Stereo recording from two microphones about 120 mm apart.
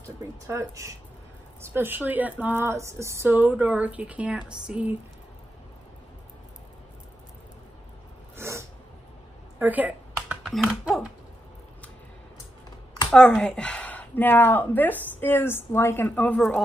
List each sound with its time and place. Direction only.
0.0 s speech: 25° right (ahead or behind); by 4.9 s 10° right (ahead or behind)
8.4 s a sound: 20° right (ahead or behind)
10.5 s speech: 5° right (ahead or behind)
13.1 s speech: 5° left (ahead or behind)